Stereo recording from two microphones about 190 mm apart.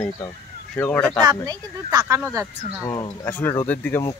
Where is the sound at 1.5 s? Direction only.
20° right (ahead or behind).